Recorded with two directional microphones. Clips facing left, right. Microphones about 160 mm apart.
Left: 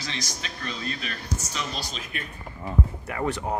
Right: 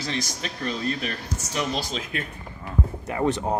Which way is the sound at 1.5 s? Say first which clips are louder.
Right 6 dB; 90° right.